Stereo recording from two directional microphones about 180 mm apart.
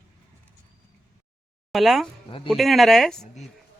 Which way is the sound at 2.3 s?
30° left (ahead or behind).